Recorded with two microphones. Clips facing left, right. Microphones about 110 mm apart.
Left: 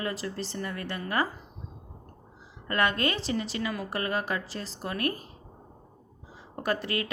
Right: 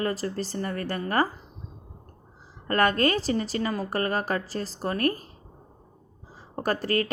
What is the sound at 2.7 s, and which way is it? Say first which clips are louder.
A woman's voice: right 5 dB; 40° right (ahead or behind).